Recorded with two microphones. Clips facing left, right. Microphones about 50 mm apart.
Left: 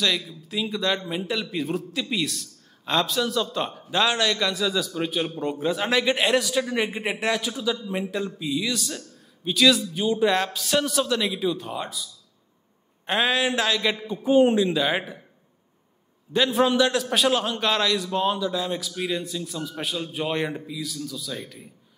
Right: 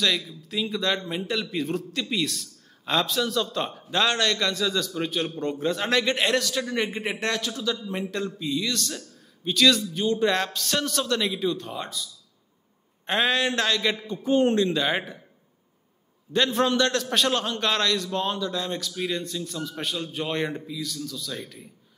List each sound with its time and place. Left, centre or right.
0.0 s a man's voice: centre
16.5 s a man's voice: centre